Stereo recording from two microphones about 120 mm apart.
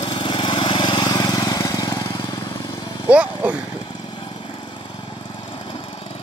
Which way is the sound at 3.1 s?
10° right (ahead or behind).